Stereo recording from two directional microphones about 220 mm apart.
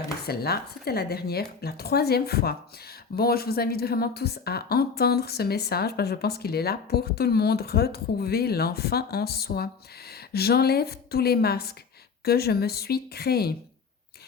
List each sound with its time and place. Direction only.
0.3 s speech: 45° left (ahead or behind)